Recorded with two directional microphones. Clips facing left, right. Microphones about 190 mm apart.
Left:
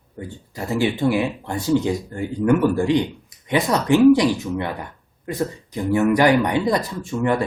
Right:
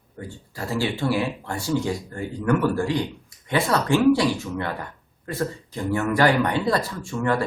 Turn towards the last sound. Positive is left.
turn(degrees=20)  # may be behind; listen again after turning